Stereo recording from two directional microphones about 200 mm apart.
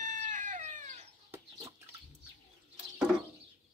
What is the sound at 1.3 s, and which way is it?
Chicken, 20° right (ahead or behind).